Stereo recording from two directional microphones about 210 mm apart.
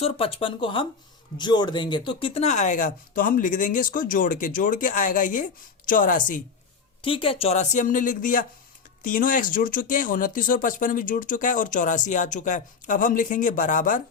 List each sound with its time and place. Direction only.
0.0 s speech: 25° left (ahead or behind)
7.0 s speech: 25° left (ahead or behind)